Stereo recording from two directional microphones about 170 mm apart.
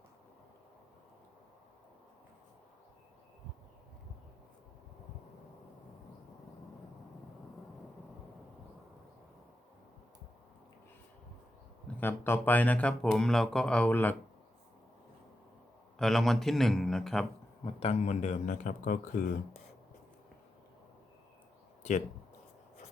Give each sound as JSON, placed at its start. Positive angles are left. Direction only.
{"t": 11.9, "sound": "speech", "side_deg": 15}
{"t": 16.0, "sound": "a man's voice", "side_deg": 0}
{"t": 17.7, "sound": "speech", "side_deg": 35}